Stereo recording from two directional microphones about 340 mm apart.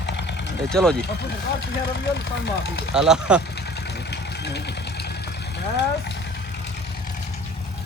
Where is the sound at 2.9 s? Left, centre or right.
Centre.